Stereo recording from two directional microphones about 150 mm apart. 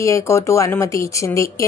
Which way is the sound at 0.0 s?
20° left (ahead or behind).